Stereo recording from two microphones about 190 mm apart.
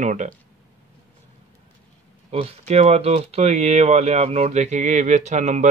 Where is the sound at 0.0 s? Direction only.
40° right (ahead or behind).